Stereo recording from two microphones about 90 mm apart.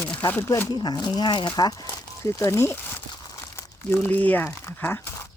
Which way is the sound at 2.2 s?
35° left (ahead or behind).